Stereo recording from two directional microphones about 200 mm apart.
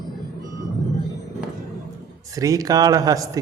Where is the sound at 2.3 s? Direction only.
15° right (ahead or behind).